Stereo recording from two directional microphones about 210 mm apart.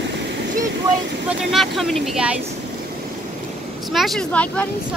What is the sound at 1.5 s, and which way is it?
Speech, centre (ahead or behind).